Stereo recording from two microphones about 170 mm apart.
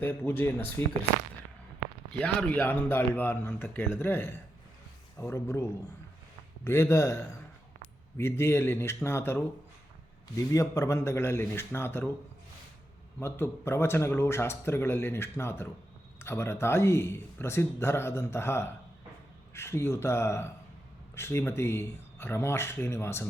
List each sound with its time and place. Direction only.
0.0 s a man's voice: 10° left (ahead or behind)
2.1 s a man's voice: 5° left (ahead or behind)
6.7 s a man's voice: 15° left (ahead or behind)
13.1 s a man's voice: 15° left (ahead or behind)